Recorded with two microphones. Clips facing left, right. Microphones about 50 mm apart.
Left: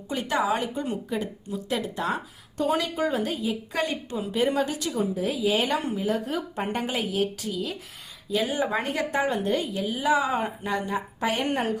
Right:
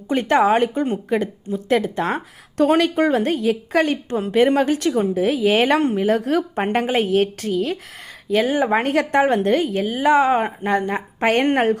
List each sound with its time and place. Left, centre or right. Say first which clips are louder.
0.1 s a woman's voice: right 9 dB; right